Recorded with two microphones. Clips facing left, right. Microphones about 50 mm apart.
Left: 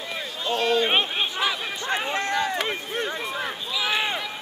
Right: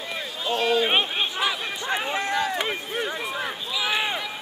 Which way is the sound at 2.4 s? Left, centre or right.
Centre.